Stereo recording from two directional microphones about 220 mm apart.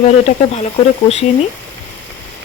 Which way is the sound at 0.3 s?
30° left (ahead or behind).